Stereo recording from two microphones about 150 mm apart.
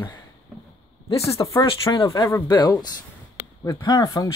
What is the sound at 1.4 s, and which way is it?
Speech, 20° left (ahead or behind).